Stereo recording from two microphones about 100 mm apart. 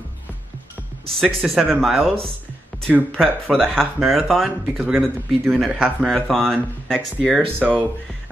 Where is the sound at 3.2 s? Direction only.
5° left (ahead or behind).